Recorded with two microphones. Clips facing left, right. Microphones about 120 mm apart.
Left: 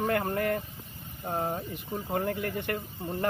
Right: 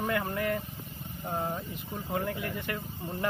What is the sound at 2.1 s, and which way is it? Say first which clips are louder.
Speech: left 2 dB; 45° left (ahead or behind).